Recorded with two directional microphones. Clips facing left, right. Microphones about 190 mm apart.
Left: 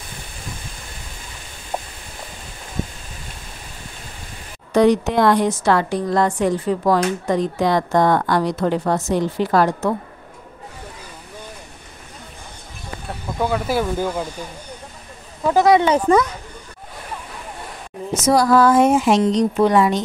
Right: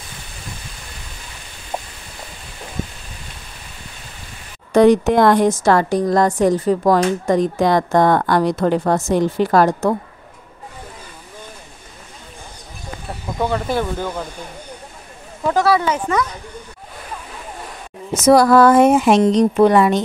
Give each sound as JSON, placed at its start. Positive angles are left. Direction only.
{"t": 4.7, "sound": "a woman's voice", "side_deg": -50}
{"t": 13.4, "sound": "speech", "side_deg": 5}
{"t": 15.4, "sound": "speech", "side_deg": 15}
{"t": 15.9, "sound": "a woman's voice", "side_deg": 30}
{"t": 18.2, "sound": "a woman's voice", "side_deg": -60}